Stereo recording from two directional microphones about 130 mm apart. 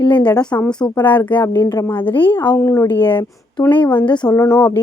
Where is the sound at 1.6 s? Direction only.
35° left (ahead or behind).